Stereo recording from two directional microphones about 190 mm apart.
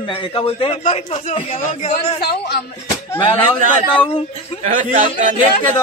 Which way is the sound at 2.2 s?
55° left (ahead or behind).